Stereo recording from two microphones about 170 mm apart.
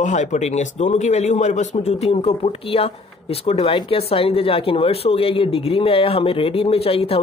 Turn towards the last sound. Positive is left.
turn(degrees=35)  # may be behind; listen again after turning